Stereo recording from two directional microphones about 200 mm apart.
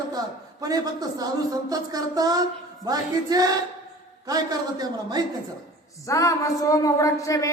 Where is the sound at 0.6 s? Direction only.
20° right (ahead or behind).